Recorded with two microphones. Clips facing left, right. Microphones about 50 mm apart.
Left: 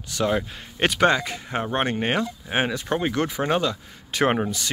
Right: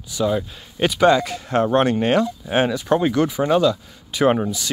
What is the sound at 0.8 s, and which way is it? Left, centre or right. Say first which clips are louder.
Speech: right 2 dB; left.